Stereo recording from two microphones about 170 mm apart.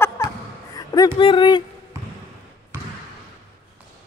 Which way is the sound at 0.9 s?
25° left (ahead or behind).